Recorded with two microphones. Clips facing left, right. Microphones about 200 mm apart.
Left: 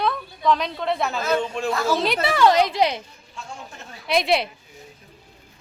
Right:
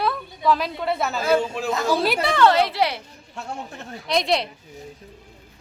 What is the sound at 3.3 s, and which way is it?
Speech, 65° right (ahead or behind).